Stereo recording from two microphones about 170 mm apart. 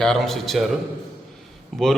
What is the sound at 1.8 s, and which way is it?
Speech, centre (ahead or behind).